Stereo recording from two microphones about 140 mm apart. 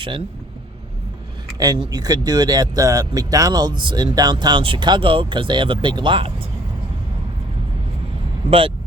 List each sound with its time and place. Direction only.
1.5 s speech: 25° right (ahead or behind)
8.4 s speech: 40° right (ahead or behind)